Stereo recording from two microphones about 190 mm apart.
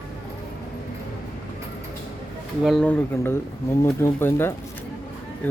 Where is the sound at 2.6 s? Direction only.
5° left (ahead or behind).